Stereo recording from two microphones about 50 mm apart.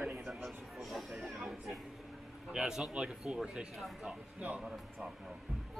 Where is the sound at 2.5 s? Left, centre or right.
Centre.